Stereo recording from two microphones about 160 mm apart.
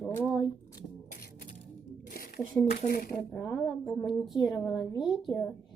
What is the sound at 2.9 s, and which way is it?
Speech, 65° left (ahead or behind).